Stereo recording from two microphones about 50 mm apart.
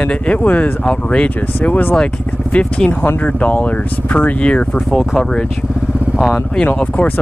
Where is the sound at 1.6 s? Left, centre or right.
Left.